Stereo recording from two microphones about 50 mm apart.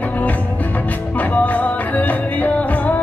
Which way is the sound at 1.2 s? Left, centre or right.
Left.